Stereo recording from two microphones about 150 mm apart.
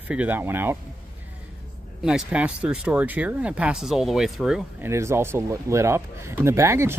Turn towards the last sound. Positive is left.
turn(degrees=-20)  # may be behind; listen again after turning